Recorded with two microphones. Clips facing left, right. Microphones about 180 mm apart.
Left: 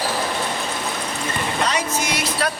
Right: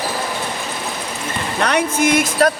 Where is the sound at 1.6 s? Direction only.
60° right (ahead or behind).